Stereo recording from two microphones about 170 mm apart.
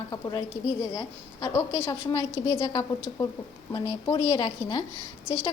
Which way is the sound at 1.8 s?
20° left (ahead or behind).